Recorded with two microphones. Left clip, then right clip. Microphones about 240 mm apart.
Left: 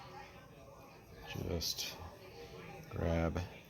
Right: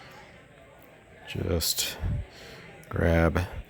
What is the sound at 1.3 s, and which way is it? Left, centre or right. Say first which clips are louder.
Speech: right 11 dB; right.